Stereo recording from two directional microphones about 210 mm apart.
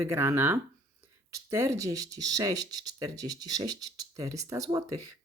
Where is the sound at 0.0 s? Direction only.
15° right (ahead or behind).